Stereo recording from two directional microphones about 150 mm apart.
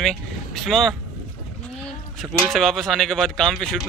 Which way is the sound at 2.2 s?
Centre (ahead or behind).